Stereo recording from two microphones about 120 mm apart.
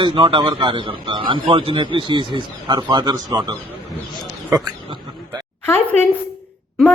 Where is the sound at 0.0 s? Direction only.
45° right (ahead or behind); by 4.7 s 30° right (ahead or behind).